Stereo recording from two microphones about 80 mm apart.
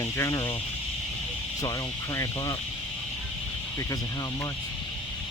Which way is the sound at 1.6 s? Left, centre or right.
Left.